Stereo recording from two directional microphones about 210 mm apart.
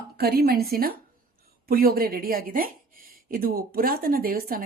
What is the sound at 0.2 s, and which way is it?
Speech, 45° right (ahead or behind).